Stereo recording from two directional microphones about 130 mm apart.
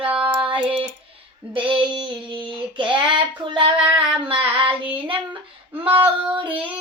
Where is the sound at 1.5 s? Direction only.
40° right (ahead or behind).